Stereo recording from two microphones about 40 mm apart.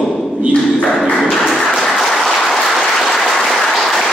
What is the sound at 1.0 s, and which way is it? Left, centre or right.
Applause, centre.